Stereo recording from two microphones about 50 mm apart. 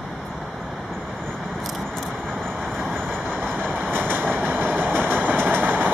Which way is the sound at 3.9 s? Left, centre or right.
Right.